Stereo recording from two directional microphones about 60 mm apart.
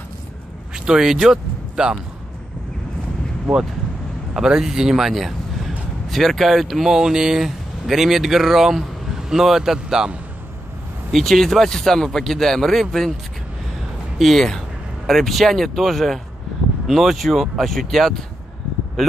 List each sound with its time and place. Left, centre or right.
0.7 s speech: centre
4.3 s speech: centre
11.1 s a man's voice: centre
14.1 s a man's voice: centre